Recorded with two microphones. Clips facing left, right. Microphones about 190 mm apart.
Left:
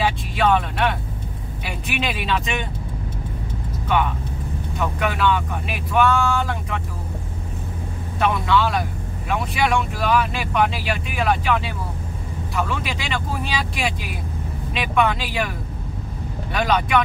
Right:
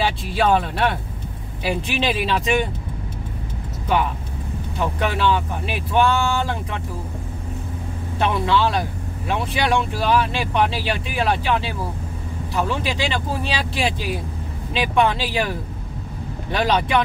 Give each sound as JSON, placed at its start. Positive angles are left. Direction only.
{"t": 0.3, "sound": "speech", "side_deg": -35}
{"t": 4.7, "sound": "speech", "side_deg": -30}
{"t": 8.2, "sound": "speech", "side_deg": -30}
{"t": 16.5, "sound": "speech", "side_deg": -30}